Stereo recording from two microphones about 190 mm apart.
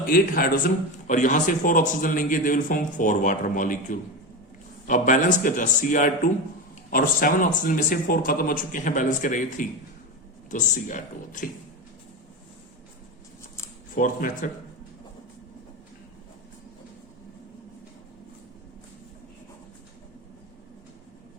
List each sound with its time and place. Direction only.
0.1 s a man's voice: 50° left (ahead or behind)
13.9 s a man's voice: 45° left (ahead or behind)